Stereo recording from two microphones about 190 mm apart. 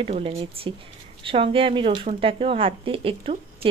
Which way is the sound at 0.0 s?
30° right (ahead or behind).